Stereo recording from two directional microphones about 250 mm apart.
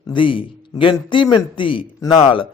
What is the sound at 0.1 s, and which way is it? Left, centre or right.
A man's voice, centre.